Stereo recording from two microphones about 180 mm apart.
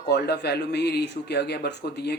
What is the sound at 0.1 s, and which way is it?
Speech, 65° left (ahead or behind).